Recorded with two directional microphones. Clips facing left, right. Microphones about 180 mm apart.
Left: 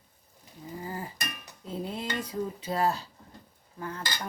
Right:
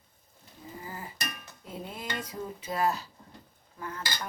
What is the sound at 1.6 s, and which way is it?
Dishes, 30° left (ahead or behind).